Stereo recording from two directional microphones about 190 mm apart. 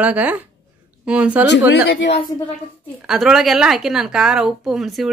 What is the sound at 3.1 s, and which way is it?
A man's voice, centre (ahead or behind).